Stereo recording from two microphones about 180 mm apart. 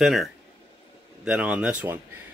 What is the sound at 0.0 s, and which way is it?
Speech, centre (ahead or behind).